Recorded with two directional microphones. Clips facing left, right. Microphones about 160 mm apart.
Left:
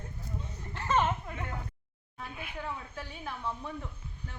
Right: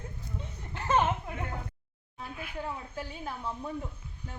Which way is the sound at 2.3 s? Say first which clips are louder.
Right 3 dB; 5° left (ahead or behind).